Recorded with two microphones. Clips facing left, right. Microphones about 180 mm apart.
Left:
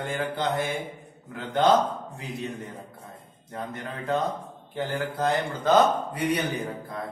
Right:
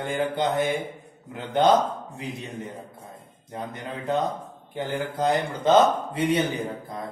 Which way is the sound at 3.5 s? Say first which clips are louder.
Right 1 dB; 15° right (ahead or behind).